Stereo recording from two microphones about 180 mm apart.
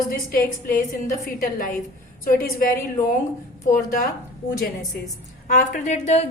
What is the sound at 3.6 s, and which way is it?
Speech, 45° left (ahead or behind).